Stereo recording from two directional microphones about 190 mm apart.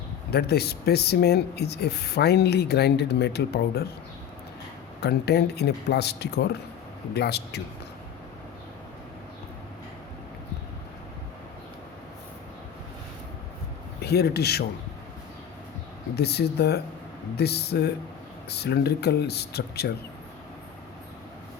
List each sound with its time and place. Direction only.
0.3 s speech: 55° left (ahead or behind)
4.9 s speech: 60° left (ahead or behind)
14.0 s speech: 60° left (ahead or behind)
16.1 s speech: 60° left (ahead or behind)